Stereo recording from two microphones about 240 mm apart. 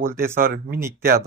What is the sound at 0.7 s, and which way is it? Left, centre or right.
Speech, centre.